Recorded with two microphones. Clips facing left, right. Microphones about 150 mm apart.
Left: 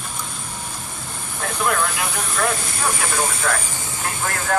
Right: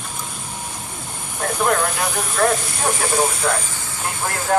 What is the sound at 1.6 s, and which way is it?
Speech, 40° right (ahead or behind).